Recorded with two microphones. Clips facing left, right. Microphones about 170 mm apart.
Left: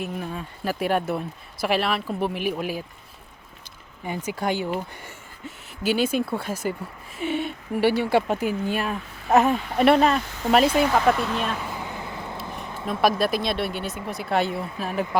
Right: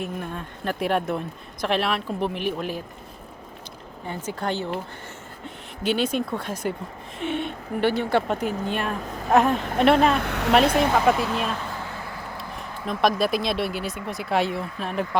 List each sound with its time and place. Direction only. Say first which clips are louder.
0.0 s speech: even; 5° left (ahead or behind)
4.3 s speech: left 2 dB; 10° left (ahead or behind)
5.8 s speech: left 1 dB; 5° left (ahead or behind)
10.2 s speech: right 2 dB; 70° right (ahead or behind)
10.8 s vehicle: even; 5° right (ahead or behind); by 12.4 s 20° left (ahead or behind)
12.4 s speech: left 1 dB; centre (ahead or behind)